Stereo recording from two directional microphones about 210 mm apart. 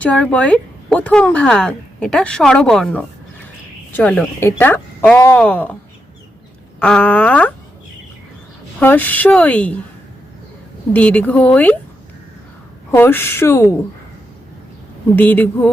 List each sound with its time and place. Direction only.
0.0 s speech: 5° left (ahead or behind)
6.7 s speech: 5° left (ahead or behind)
8.8 s speech: 10° left (ahead or behind)
10.9 s speech: 5° left (ahead or behind)
12.9 s speech: 10° left (ahead or behind)
15.1 s speech: 10° left (ahead or behind)